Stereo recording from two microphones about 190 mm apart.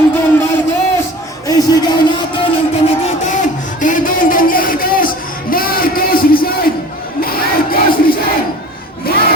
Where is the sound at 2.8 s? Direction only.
40° left (ahead or behind).